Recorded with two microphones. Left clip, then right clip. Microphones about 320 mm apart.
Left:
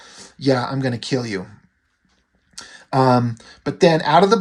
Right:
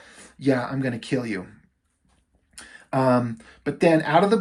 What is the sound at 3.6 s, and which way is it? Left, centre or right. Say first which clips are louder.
Speech: left 4 dB; centre.